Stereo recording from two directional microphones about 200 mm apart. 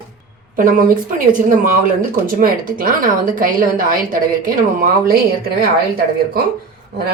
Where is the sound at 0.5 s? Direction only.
45° right (ahead or behind).